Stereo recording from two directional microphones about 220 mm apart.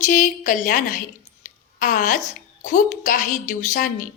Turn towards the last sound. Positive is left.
turn(degrees=35)  # may be behind; listen again after turning